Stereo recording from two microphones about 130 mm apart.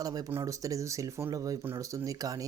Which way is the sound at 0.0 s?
30° right (ahead or behind).